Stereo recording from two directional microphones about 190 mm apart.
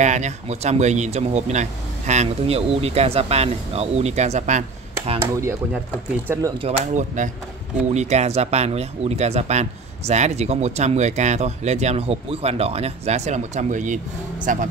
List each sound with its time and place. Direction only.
0.0 s speech: 40° right (ahead or behind)
6.2 s speech: 15° right (ahead or behind)
6.6 s speech: 35° right (ahead or behind)